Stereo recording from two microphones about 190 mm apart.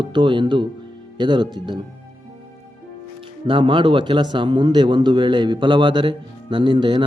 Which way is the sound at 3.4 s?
25° right (ahead or behind).